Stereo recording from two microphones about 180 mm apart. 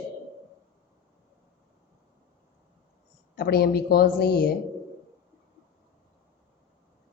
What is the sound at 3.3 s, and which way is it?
Speech, 60° left (ahead or behind).